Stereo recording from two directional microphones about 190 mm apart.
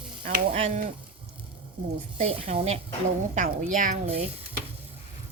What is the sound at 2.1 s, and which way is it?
A woman's voice, 30° right (ahead or behind).